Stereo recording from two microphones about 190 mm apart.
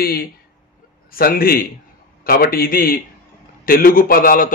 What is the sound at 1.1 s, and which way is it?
A man's voice, 50° left (ahead or behind).